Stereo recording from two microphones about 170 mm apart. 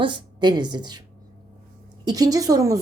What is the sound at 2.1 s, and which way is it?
Speech, 20° right (ahead or behind).